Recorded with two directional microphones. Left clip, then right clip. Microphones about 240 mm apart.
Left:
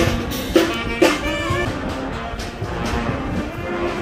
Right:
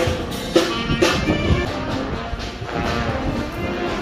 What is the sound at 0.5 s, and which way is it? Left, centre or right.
Music, left.